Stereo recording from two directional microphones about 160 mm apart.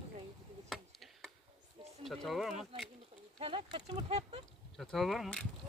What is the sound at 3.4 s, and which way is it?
Speech, 35° right (ahead or behind).